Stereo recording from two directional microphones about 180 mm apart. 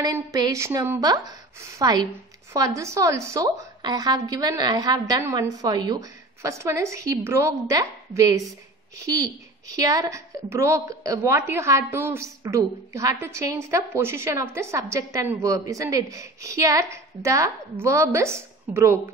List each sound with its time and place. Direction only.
0.0 s a woman's voice: 20° right (ahead or behind)